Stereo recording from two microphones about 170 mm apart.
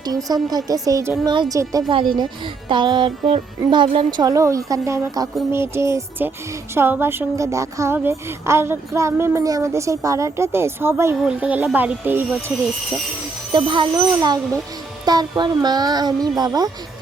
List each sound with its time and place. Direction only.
0.0 s speech: 20° right (ahead or behind)
13.5 s speech: 30° right (ahead or behind)